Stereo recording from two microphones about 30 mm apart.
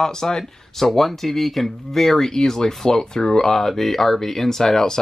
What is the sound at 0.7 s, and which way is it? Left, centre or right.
Speech, centre.